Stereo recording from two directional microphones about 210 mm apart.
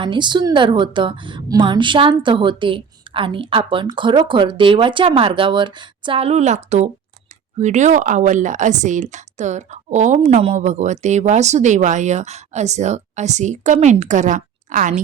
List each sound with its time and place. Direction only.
0.0 s a woman's voice: 20° right (ahead or behind); by 15.0 s 40° right (ahead or behind)